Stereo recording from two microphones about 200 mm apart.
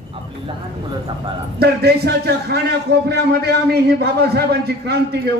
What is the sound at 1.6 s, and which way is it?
A man's voice, 55° right (ahead or behind).